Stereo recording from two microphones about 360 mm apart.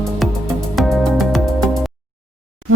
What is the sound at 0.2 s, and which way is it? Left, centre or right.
Music, centre.